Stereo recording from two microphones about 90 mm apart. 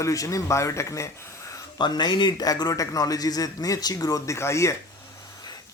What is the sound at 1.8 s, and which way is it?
Speech, 55° left (ahead or behind).